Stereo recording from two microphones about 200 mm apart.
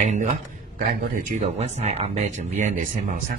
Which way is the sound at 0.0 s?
35° right (ahead or behind).